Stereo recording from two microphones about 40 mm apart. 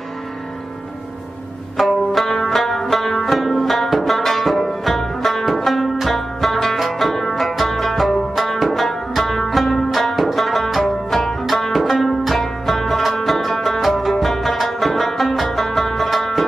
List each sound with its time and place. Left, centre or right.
1.8 s music: centre